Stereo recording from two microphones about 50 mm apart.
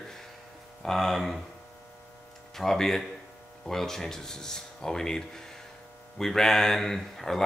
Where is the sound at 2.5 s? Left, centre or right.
Centre.